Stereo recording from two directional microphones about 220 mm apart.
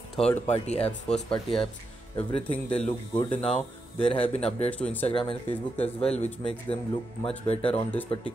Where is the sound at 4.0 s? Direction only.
25° left (ahead or behind).